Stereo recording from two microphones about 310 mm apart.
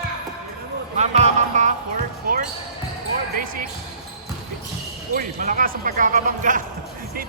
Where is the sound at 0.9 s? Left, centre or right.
Right.